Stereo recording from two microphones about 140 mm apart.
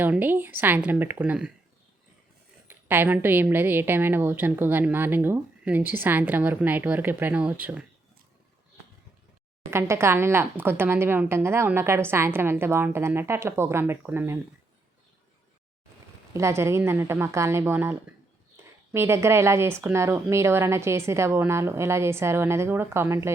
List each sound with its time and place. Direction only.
0.0 s a woman's voice: 15° right (ahead or behind)
2.6 s a woman's voice: 15° right (ahead or behind)
9.6 s a woman's voice: 20° right (ahead or behind)
16.3 s a woman's voice: 20° right (ahead or behind)
18.9 s a woman's voice: 20° right (ahead or behind)